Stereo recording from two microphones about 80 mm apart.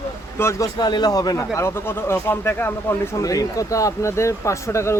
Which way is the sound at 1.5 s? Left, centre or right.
Left.